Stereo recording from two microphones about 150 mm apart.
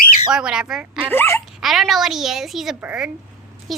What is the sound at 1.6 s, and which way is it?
A woman's voice, centre (ahead or behind).